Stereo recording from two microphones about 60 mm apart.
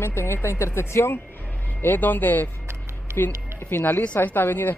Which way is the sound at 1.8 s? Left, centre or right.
Left.